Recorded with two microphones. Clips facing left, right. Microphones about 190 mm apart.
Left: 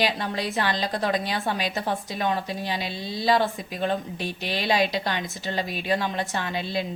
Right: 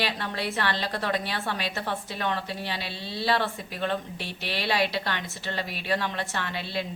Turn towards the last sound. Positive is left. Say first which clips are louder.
# left 3 dB
turn(degrees=15)  # may be behind; listen again after turning